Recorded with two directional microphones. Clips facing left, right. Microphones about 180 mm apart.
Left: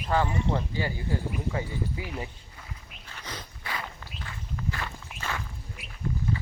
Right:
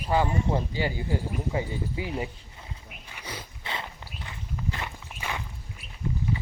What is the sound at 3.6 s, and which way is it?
Walk, 25° right (ahead or behind).